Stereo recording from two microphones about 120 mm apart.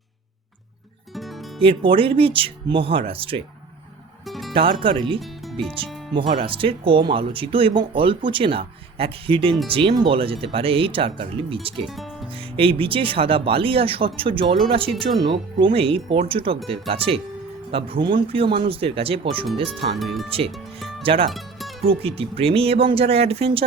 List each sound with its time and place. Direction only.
1.1 s music: centre (ahead or behind)
1.6 s speech: 50° right (ahead or behind)
4.3 s music: centre (ahead or behind)
4.5 s speech: 50° right (ahead or behind)
11.9 s music: centre (ahead or behind)
12.5 s speech: 50° right (ahead or behind)
19.7 s speech: centre (ahead or behind)
21.0 s speech: 50° right (ahead or behind)
21.2 s music: centre (ahead or behind)
21.8 s speech: 50° right (ahead or behind)